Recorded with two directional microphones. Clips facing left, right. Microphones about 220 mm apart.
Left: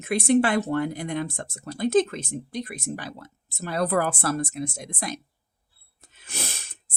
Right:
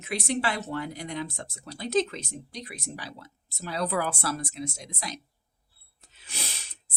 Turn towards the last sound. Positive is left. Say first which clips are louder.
# left 5 dB
turn(degrees=50)  # may be behind; listen again after turning